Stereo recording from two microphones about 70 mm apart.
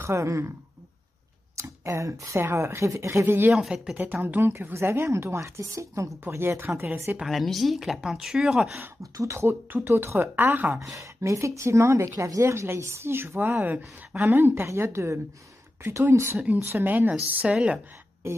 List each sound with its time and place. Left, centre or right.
0.0 s speech: right
1.6 s speech: right
3.5 s speech: centre
4.0 s a woman's voice: right
6.2 s a woman's voice: right
7.2 s speech: centre
9.0 s a woman's voice: right
10.8 s a woman's voice: right; by 17.7 s centre
18.2 s a woman's voice: right